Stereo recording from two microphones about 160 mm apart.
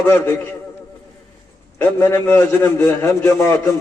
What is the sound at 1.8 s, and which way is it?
A man's voice, 15° left (ahead or behind).